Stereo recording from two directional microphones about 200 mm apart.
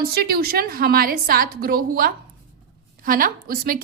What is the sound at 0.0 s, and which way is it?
A woman's voice, 50° right (ahead or behind).